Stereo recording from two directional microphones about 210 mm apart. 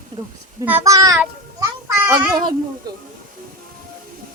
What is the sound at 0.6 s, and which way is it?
A child's voice, 10° right (ahead or behind).